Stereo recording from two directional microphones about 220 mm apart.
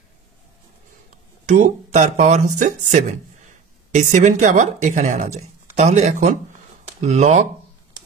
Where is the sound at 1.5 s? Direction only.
35° right (ahead or behind).